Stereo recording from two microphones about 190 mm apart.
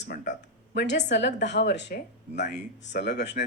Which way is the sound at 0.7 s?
65° left (ahead or behind).